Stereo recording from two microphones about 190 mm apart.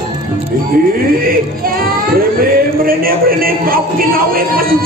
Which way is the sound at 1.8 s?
50° right (ahead or behind).